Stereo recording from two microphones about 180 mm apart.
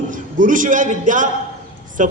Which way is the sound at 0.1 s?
45° right (ahead or behind).